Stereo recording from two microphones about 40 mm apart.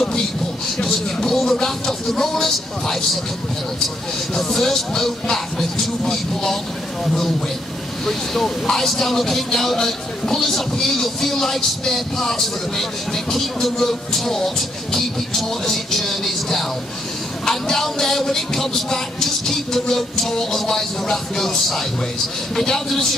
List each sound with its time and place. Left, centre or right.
0.7 s speech: centre
4.3 s speech: centre